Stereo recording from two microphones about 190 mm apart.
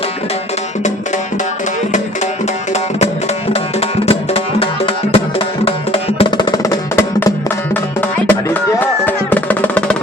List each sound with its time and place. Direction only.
3.5 s music: 30° left (ahead or behind); by 10.0 s 5° left (ahead or behind)